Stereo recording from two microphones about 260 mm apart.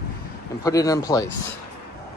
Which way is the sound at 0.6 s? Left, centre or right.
Centre.